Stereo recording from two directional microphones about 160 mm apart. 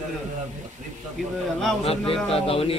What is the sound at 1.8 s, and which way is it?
Speech, 40° left (ahead or behind).